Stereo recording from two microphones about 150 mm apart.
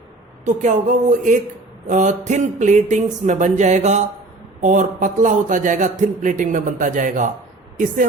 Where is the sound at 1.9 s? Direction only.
55° right (ahead or behind).